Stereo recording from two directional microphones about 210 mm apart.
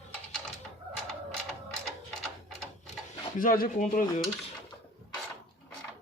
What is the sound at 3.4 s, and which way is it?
Speech, 40° left (ahead or behind).